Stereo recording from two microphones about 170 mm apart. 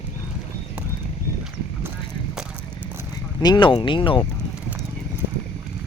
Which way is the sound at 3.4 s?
25° left (ahead or behind).